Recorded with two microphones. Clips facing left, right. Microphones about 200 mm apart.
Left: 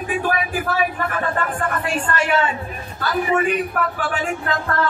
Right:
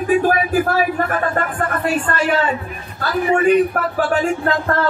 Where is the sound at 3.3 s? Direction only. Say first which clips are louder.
Right 9 dB; 40° right (ahead or behind).